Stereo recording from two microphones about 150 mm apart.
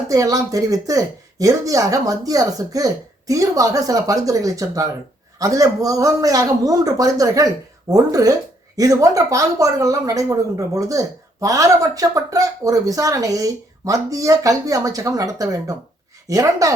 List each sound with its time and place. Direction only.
0.1 s speech: 25° right (ahead or behind)